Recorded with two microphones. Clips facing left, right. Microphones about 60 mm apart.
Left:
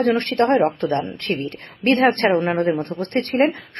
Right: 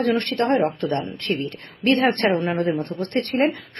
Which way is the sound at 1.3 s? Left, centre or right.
Left.